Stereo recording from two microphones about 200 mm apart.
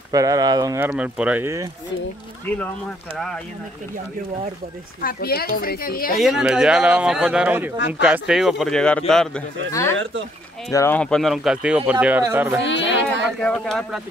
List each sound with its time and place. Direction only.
0.1 s speech: 15° right (ahead or behind)
2.4 s speech: 10° left (ahead or behind)
5.0 s a woman's voice: 50° left (ahead or behind)
6.2 s speech: 5° right (ahead or behind)
9.7 s speech: 15° left (ahead or behind); by 12.5 s 15° right (ahead or behind)
12.6 s speech: 65° left (ahead or behind)
13.4 s speech: 5° left (ahead or behind)